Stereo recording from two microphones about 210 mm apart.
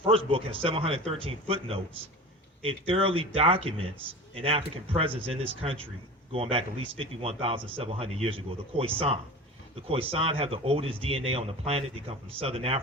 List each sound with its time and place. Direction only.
0.1 s speech: 25° right (ahead or behind)